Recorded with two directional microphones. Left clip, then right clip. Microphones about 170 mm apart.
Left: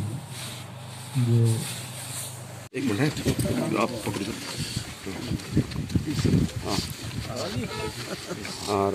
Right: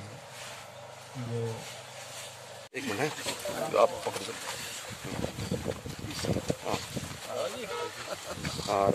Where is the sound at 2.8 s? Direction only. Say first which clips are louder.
Left 5 dB; 70° right (ahead or behind).